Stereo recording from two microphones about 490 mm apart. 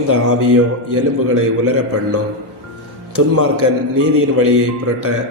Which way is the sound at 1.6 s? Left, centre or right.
Right.